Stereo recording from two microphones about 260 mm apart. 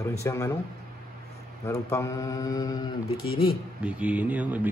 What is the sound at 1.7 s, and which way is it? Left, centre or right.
Speech, centre.